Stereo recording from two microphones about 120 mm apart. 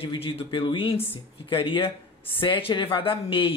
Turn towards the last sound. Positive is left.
turn(degrees=50)  # may be behind; listen again after turning